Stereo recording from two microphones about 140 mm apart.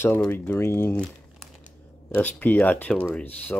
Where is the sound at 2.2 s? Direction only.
10° left (ahead or behind).